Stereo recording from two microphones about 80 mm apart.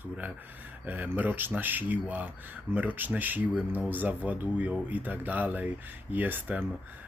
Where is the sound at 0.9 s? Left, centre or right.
Right.